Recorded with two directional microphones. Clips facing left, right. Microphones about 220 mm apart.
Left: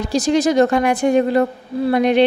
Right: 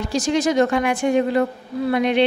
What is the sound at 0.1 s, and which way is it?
A woman's voice, 35° left (ahead or behind).